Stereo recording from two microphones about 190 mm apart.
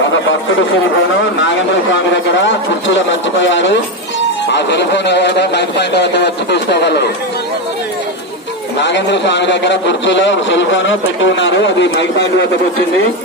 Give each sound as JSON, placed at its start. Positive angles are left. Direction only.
{"t": 2.4, "sound": "a man's voice", "side_deg": 75}
{"t": 8.8, "sound": "a man's voice", "side_deg": 70}